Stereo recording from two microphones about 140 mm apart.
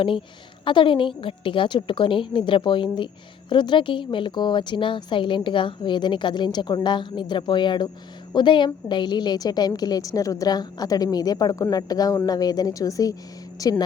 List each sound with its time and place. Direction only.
0.6 s a woman's voice: 35° left (ahead or behind)